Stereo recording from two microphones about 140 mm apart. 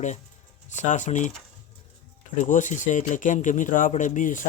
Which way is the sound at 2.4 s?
65° left (ahead or behind).